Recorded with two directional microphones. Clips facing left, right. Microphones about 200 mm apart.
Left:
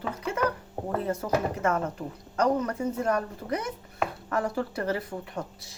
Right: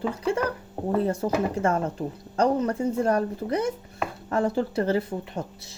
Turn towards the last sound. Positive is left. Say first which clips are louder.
# right 2 dB
turn(degrees=-25)  # may be behind; listen again after turning